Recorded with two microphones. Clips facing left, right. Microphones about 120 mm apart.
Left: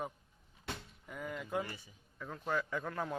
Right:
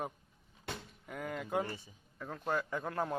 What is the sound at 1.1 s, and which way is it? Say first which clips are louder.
Speech: right 2 dB; 55° right (ahead or behind).